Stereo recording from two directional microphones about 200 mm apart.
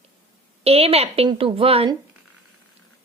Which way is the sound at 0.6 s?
30° right (ahead or behind).